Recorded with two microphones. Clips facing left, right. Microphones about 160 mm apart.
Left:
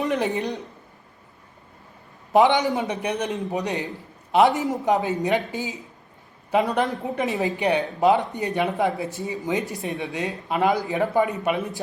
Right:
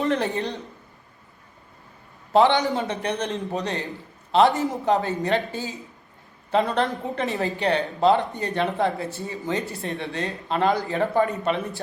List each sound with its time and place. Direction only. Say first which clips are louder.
0.0 s speech: even; 15° left (ahead or behind)
2.3 s speech: left 1 dB; 15° left (ahead or behind)